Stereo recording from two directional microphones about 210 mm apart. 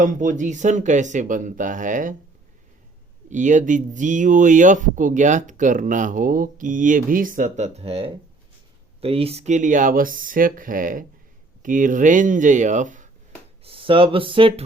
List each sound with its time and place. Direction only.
0.0 s speech: 35° right (ahead or behind)
3.2 s speech: 35° right (ahead or behind)
13.7 s speech: 25° right (ahead or behind)